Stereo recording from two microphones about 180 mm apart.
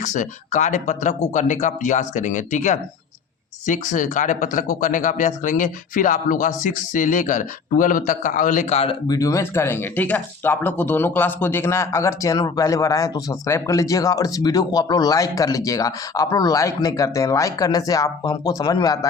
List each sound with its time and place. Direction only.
0.0 s speech: 45° left (ahead or behind)
9.0 s speech: 20° left (ahead or behind)